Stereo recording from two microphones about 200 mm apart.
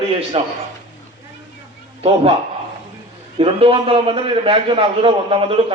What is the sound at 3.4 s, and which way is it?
A man's voice, 30° right (ahead or behind).